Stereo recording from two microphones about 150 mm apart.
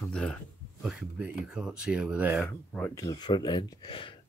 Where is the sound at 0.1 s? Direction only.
5° left (ahead or behind).